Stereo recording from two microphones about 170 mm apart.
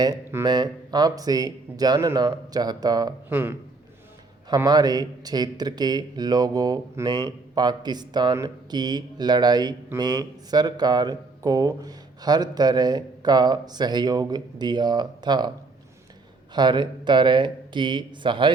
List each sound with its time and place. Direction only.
0.0 s speech: 15° right (ahead or behind)
0.4 s speech: 25° right (ahead or behind)
16.6 s speech: 25° right (ahead or behind)